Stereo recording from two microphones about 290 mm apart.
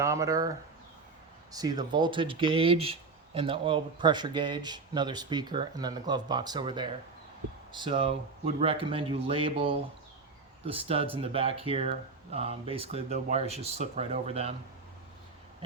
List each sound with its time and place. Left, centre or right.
0.0 s speech: centre
1.5 s speech: centre